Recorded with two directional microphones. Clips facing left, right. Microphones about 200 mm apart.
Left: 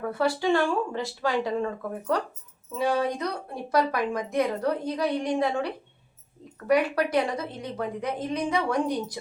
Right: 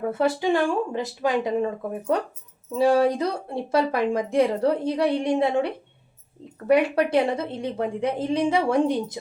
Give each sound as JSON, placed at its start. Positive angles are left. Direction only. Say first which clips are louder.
{"t": 0.0, "sound": "speech", "louder": "right 3 dB", "side_deg": -20}